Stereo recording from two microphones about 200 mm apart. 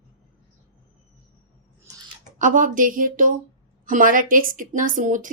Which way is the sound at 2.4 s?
40° right (ahead or behind).